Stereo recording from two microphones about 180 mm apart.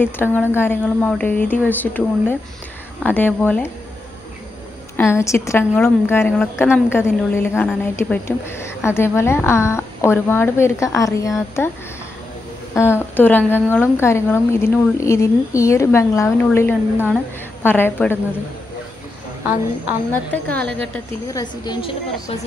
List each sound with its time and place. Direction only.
0.0 s a woman's voice: 10° left (ahead or behind)
4.9 s a woman's voice: 15° left (ahead or behind)
12.7 s a woman's voice: 15° left (ahead or behind)
20.1 s a woman's voice: 10° left (ahead or behind)
21.3 s a woman's voice: 20° left (ahead or behind)